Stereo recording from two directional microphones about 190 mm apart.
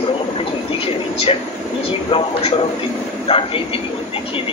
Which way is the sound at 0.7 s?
30° left (ahead or behind).